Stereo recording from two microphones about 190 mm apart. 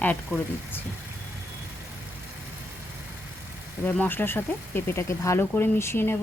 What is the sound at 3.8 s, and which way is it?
Speech, 10° left (ahead or behind).